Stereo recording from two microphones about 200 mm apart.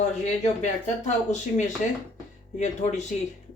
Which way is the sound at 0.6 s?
35° left (ahead or behind).